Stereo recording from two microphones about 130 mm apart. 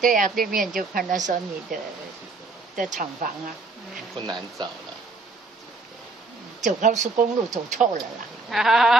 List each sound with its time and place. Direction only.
0.0 s a woman's voice: 90° right; by 1.4 s 75° right (ahead or behind)
2.9 s speech: 80° right
4.2 s speech: 35° right (ahead or behind)
6.6 s speech: 70° right (ahead or behind)
8.5 s sheep: centre (ahead or behind)